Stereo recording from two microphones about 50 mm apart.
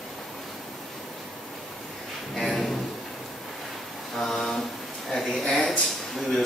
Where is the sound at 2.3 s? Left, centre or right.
Centre.